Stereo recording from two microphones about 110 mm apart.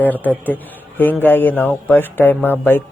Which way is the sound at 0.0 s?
15° left (ahead or behind).